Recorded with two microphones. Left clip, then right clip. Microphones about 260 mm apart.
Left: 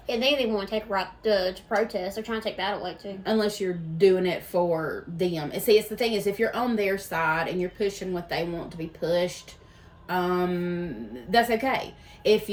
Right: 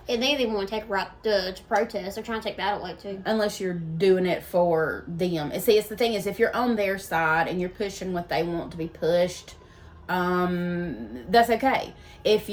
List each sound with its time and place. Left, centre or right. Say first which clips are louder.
0.1 s a woman's voice: even; centre
3.2 s a woman's voice: even; centre